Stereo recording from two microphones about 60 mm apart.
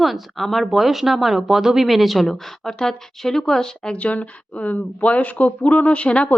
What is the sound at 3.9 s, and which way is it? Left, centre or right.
Speech, left.